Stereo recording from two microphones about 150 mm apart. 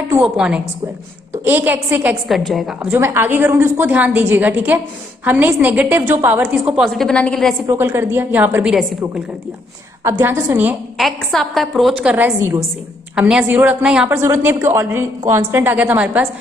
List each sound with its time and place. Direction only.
0.2 s a woman's voice: 5° right (ahead or behind)
2.2 s a woman's voice: centre (ahead or behind)
2.9 s a woman's voice: 15° right (ahead or behind)
6.8 s a woman's voice: centre (ahead or behind)
7.7 s a woman's voice: 15° right (ahead or behind)
10.0 s a woman's voice: 15° right (ahead or behind)
11.0 s a woman's voice: centre (ahead or behind)
12.4 s a woman's voice: 20° right (ahead or behind)
13.1 s a woman's voice: 5° right (ahead or behind)